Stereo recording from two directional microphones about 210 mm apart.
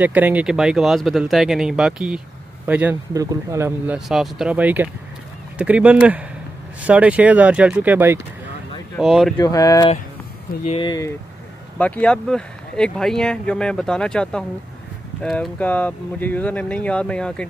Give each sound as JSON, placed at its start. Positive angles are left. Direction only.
{"t": 0.0, "sound": "speech", "side_deg": -10}
{"t": 9.4, "sound": "speech", "side_deg": 15}
{"t": 11.8, "sound": "speech", "side_deg": 5}